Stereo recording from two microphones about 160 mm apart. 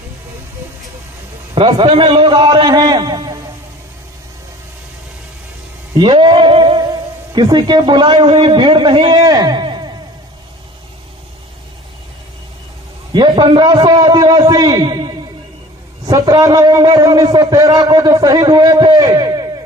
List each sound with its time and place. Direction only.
1.5 s a man's voice: 35° right (ahead or behind)
5.9 s a sound: 30° right (ahead or behind)
7.3 s a man's voice: 25° right (ahead or behind)
13.1 s a man's voice: 30° right (ahead or behind)